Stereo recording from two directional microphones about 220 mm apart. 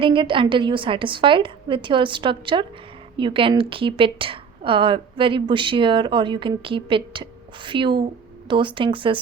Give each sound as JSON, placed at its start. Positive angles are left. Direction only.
{"t": 0.0, "sound": "a woman's voice", "side_deg": -25}